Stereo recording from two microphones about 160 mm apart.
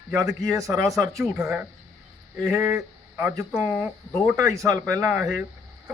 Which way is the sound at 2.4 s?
20° right (ahead or behind).